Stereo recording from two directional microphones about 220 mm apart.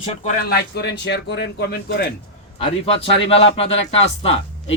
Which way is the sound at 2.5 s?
25° left (ahead or behind).